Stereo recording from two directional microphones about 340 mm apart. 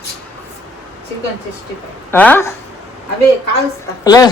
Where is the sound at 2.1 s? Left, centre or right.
Centre.